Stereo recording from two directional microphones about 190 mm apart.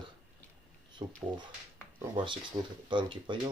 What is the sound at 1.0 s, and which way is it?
Speech, 25° right (ahead or behind).